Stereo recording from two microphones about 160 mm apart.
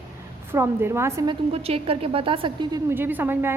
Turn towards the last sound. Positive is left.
turn(degrees=-15)  # may be behind; listen again after turning